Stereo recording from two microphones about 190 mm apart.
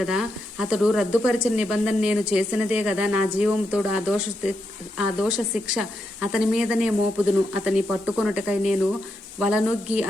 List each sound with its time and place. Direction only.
0.0 s speech: centre (ahead or behind)